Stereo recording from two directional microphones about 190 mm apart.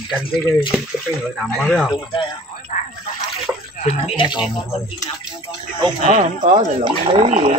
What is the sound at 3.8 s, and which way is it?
Speech, 35° left (ahead or behind).